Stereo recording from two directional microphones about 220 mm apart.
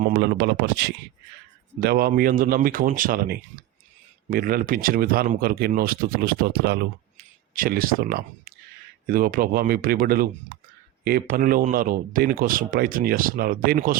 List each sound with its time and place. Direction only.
0.0 s speech: 45° right (ahead or behind)